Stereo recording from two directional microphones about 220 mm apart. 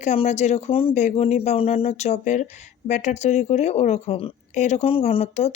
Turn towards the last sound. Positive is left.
turn(degrees=30)  # may be behind; listen again after turning